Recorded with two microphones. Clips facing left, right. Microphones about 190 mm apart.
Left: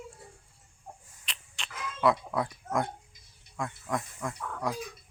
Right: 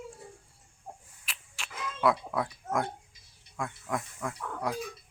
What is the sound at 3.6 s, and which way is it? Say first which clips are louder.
Snake: left 1 dB; centre (ahead or behind).